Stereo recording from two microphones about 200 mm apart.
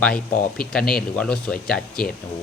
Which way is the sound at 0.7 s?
5° left (ahead or behind).